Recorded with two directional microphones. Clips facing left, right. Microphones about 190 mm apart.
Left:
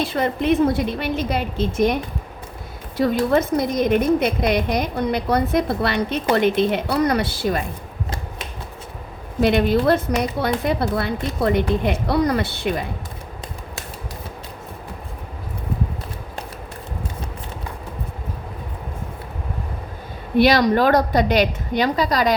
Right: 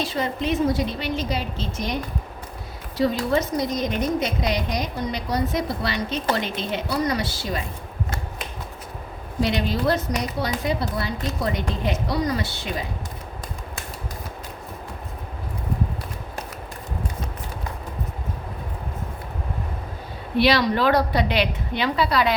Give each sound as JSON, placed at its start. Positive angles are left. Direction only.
{"t": 0.0, "sound": "a woman's voice", "side_deg": 55}
{"t": 3.0, "sound": "a woman's voice", "side_deg": 55}
{"t": 9.4, "sound": "a woman's voice", "side_deg": 55}
{"t": 20.3, "sound": "a woman's voice", "side_deg": 45}